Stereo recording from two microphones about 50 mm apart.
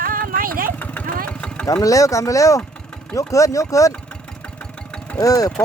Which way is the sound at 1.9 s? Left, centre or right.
Left.